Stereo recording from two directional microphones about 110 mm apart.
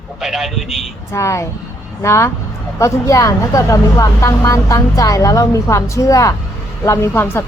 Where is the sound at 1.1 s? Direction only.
25° left (ahead or behind).